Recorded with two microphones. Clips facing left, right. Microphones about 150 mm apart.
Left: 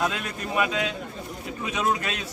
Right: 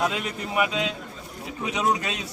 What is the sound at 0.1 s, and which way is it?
A man's voice, 20° right (ahead or behind).